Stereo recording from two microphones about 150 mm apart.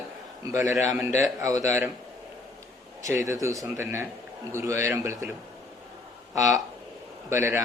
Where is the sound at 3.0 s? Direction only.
20° right (ahead or behind).